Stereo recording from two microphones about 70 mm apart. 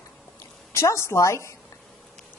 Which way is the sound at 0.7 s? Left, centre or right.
Left.